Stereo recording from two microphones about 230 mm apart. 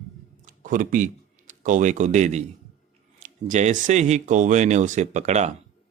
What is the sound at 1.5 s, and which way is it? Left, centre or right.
A man's voice, right.